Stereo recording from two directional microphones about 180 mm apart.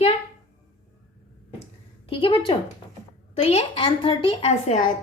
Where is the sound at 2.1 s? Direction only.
30° left (ahead or behind).